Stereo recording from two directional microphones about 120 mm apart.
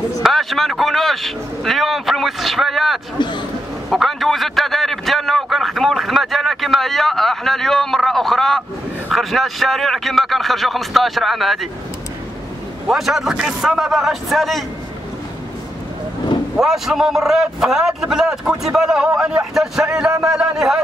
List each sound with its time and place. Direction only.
0.2 s a man's voice: centre (ahead or behind)
3.2 s speech: 40° left (ahead or behind)
3.9 s a man's voice: centre (ahead or behind)
12.8 s a man's voice: centre (ahead or behind)
16.5 s a man's voice: 5° right (ahead or behind)